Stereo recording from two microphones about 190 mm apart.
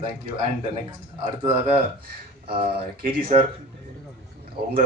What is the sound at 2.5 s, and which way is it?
Speech, 50° right (ahead or behind).